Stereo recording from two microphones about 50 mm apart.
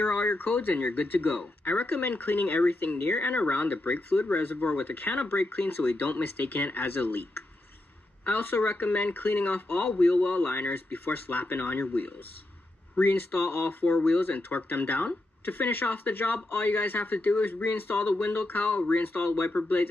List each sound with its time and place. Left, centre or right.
0.0 s speech: left
9.9 s speech: left